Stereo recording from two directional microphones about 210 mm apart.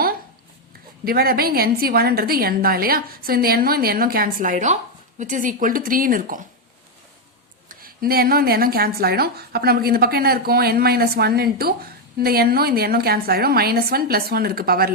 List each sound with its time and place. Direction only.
1.0 s a woman's voice: 45° right (ahead or behind)
7.7 s speech: 45° right (ahead or behind)